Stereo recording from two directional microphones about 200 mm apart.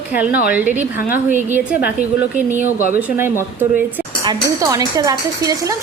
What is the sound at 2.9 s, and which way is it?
Speech, 10° right (ahead or behind).